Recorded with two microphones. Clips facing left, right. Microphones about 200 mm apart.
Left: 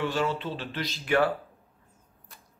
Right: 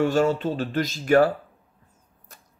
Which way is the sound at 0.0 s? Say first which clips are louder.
Right 8 dB; 45° right (ahead or behind).